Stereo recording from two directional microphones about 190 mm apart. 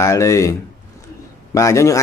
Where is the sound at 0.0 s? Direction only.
15° left (ahead or behind).